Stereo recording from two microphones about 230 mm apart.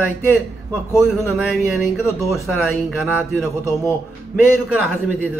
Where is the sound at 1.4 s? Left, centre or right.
Centre.